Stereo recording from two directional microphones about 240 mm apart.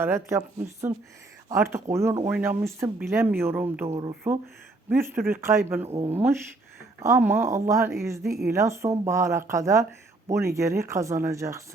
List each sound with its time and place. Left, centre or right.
0.0 s speech: centre
7.0 s speech: centre